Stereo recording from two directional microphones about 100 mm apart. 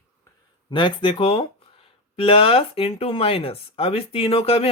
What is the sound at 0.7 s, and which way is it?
Speech, 50° left (ahead or behind).